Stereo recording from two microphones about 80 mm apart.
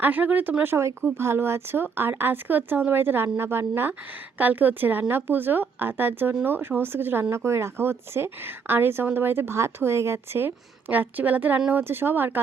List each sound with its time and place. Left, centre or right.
0.0 s speech: right